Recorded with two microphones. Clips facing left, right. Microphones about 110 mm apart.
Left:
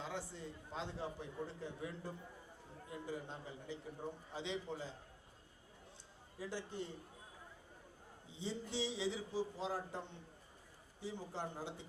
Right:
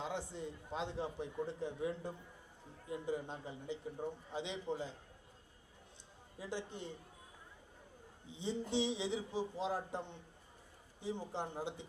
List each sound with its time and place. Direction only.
0.0 s a man's voice: 20° right (ahead or behind)
6.4 s a man's voice: 20° right (ahead or behind)
8.3 s a man's voice: 20° right (ahead or behind)